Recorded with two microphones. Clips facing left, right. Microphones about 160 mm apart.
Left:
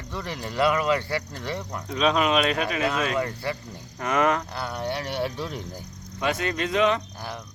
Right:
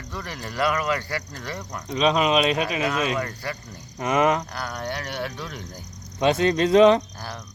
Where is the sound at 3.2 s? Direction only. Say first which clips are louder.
Left 2 dB; 25° left (ahead or behind).